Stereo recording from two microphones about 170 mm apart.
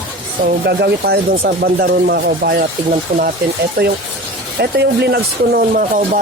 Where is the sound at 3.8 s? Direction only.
65° right (ahead or behind).